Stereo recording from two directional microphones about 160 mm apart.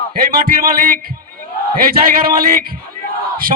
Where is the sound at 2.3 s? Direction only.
65° right (ahead or behind).